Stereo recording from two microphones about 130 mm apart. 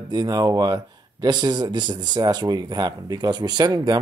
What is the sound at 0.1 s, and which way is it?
Speech, 30° right (ahead or behind).